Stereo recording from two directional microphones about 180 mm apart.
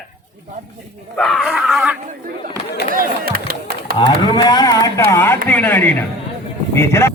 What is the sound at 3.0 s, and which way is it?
Chop, 55° right (ahead or behind).